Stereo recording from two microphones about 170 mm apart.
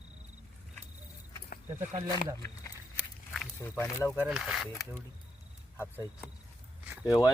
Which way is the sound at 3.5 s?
15° left (ahead or behind).